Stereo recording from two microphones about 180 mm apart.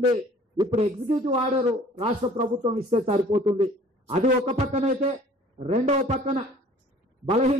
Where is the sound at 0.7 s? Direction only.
35° right (ahead or behind).